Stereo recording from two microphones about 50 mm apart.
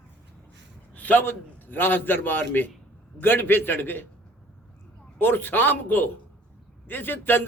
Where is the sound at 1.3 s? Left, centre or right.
Left.